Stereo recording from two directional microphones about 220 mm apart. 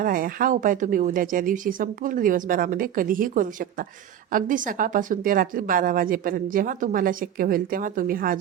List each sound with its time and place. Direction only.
0.0 s speech: 40° right (ahead or behind)